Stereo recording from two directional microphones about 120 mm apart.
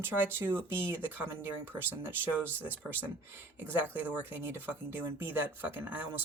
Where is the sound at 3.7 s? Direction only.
15° right (ahead or behind).